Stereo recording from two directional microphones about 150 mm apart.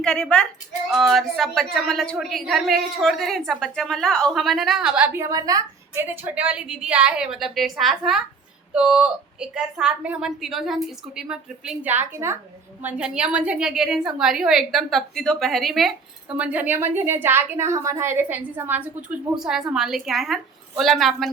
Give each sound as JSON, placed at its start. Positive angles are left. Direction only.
{"t": 0.0, "sound": "a woman's voice", "side_deg": 5}
{"t": 16.4, "sound": "a woman's voice", "side_deg": -10}